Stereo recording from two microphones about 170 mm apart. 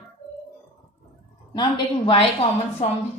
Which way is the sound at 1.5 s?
30° left (ahead or behind).